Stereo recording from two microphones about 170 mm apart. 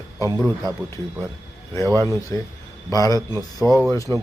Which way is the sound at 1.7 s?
15° left (ahead or behind).